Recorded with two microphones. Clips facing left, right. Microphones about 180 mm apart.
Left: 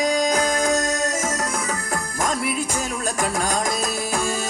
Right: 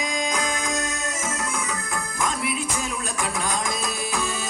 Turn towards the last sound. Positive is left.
turn(degrees=35)  # may be behind; listen again after turning